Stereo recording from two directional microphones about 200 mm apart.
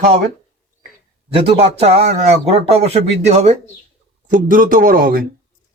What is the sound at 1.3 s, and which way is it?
Speech, 30° right (ahead or behind).